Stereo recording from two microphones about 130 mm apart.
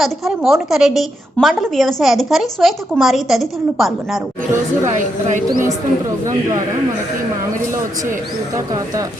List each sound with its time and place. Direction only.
0.0 s a woman's voice: centre (ahead or behind)
8.5 s speech: 25° right (ahead or behind)